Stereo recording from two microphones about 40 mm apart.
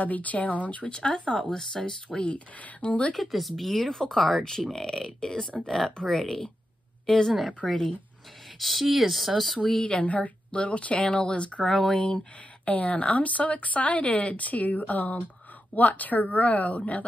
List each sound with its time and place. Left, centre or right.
0.0 s speech: left; by 2.0 s centre
2.1 s speech: left
3.2 s speech: centre
7.6 s speech: centre
9.6 s speech: centre
11.6 s speech: centre
12.6 s a woman's voice: left